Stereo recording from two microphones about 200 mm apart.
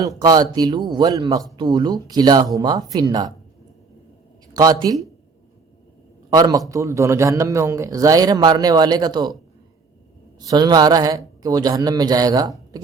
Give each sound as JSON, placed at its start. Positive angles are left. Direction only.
{"t": 0.2, "sound": "speech", "side_deg": -20}
{"t": 4.5, "sound": "speech", "side_deg": -20}
{"t": 6.3, "sound": "speech", "side_deg": -20}
{"t": 10.5, "sound": "speech", "side_deg": -20}